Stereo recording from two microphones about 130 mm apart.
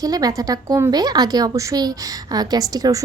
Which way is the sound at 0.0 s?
30° right (ahead or behind).